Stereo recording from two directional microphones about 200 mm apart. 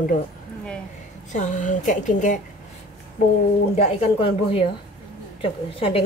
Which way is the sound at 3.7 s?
30° left (ahead or behind).